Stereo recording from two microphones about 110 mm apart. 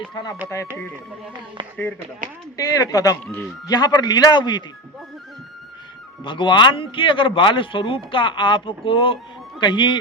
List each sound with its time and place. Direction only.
0.1 s a man's voice: 40° left (ahead or behind)
2.6 s a man's voice: 30° left (ahead or behind)
6.2 s a man's voice: 45° left (ahead or behind)